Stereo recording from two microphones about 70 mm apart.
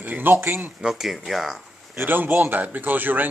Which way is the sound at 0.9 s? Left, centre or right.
Centre.